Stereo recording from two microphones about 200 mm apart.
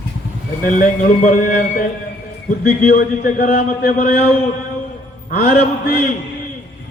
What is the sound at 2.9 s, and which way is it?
A man's voice, 45° left (ahead or behind).